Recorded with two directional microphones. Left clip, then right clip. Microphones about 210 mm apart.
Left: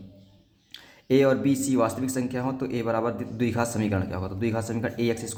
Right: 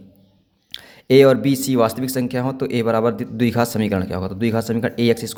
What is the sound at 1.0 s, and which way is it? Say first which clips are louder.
Speech: right 9 dB; 40° right (ahead or behind).